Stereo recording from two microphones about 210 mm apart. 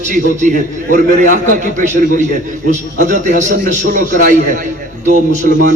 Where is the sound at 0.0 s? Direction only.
35° right (ahead or behind).